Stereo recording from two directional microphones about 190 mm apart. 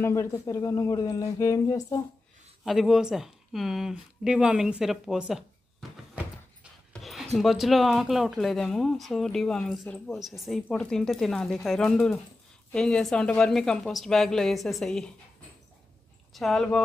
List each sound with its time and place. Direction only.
0.0 s speech: 15° left (ahead or behind)
2.6 s speech: centre (ahead or behind)
6.9 s a sound: centre (ahead or behind)
7.3 s speech: centre (ahead or behind)
16.3 s speech: centre (ahead or behind)